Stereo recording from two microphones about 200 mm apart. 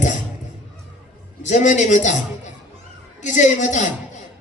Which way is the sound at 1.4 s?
40° left (ahead or behind).